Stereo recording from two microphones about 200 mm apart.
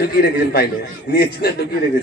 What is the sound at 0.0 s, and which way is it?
A man's voice, 50° left (ahead or behind).